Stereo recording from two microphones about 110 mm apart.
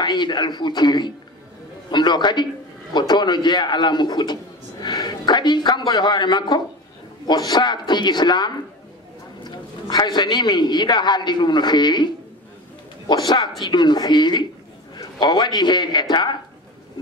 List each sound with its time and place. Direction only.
0.0 s a man's voice: 40° left (ahead or behind)
13.1 s a man's voice: 35° left (ahead or behind)